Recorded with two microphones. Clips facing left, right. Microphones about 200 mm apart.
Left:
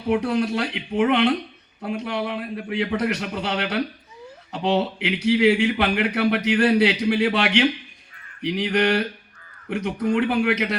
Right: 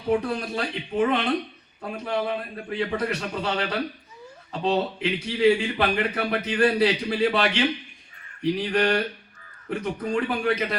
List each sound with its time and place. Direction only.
0.3 s speech: 70° left (ahead or behind)